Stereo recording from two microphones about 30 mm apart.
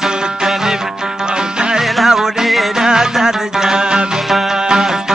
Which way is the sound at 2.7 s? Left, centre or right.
Centre.